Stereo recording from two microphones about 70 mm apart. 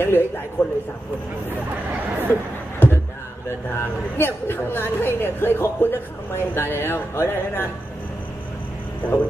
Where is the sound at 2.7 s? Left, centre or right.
Left.